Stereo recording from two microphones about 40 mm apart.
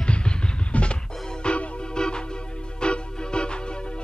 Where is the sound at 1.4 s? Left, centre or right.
Left.